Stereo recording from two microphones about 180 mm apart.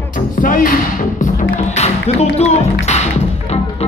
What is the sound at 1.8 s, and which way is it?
Music, 35° left (ahead or behind).